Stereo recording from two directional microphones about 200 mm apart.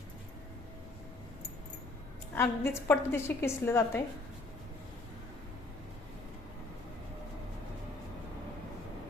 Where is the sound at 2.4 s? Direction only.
15° left (ahead or behind).